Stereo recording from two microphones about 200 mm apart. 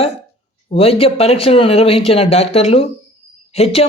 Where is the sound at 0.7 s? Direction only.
30° left (ahead or behind).